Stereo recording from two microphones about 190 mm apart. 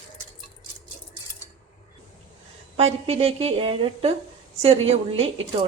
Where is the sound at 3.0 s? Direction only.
35° right (ahead or behind).